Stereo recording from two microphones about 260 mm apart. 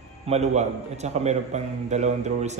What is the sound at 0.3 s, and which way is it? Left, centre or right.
A man's voice, right.